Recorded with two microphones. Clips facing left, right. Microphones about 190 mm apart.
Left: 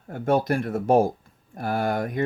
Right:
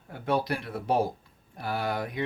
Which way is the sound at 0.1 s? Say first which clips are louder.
Left 6 dB; 45° left (ahead or behind).